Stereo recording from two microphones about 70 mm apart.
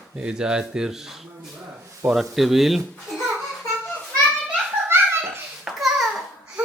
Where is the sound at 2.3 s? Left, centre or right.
Centre.